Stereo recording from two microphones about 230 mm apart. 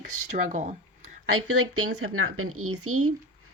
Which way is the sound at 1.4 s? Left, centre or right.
Right.